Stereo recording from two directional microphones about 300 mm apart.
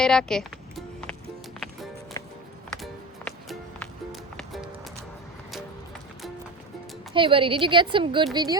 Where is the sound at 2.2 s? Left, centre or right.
Centre.